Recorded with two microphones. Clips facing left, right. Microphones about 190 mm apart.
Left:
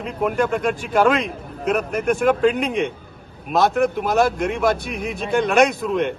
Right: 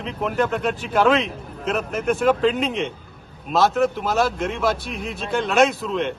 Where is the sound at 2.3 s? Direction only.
10° left (ahead or behind).